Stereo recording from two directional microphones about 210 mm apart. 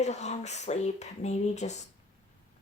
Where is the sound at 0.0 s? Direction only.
30° left (ahead or behind).